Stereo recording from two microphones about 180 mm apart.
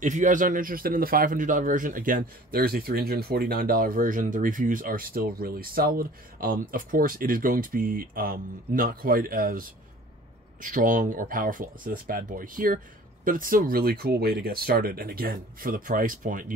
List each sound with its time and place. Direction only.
0.0 s a man's voice: 45° right (ahead or behind)